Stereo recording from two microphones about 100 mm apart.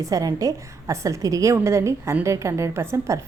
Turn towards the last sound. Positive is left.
turn(degrees=-30)  # may be behind; listen again after turning